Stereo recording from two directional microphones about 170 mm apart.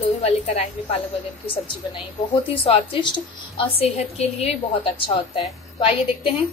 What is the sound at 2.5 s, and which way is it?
A woman's voice, 30° left (ahead or behind).